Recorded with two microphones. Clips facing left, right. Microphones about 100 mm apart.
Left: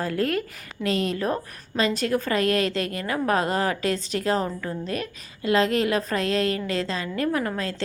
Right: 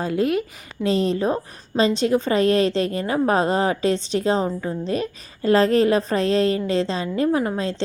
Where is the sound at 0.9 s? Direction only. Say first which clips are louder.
Right 4 dB; 30° right (ahead or behind).